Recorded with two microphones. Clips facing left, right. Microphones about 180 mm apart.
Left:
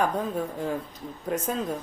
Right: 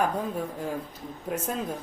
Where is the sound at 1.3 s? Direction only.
5° right (ahead or behind).